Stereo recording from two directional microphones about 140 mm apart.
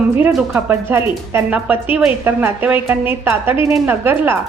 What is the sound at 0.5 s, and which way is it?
A woman's voice, 15° right (ahead or behind).